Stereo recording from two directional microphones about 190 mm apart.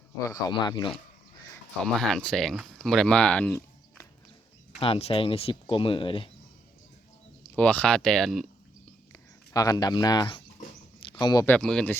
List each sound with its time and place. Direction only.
0.3 s speech: 20° left (ahead or behind)
1.8 s speech: 5° left (ahead or behind)
4.8 s speech: 30° left (ahead or behind)
7.5 s speech: 5° left (ahead or behind)
9.5 s speech: 20° left (ahead or behind)
11.4 s speech: 5° left (ahead or behind)